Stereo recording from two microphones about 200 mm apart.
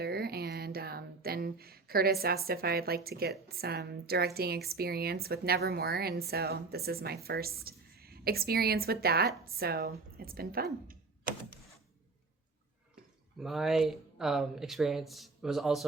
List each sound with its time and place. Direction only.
0.0 s a sound: 50° right (ahead or behind)
4.4 s speech: 50° right (ahead or behind)
13.4 s speech: centre (ahead or behind)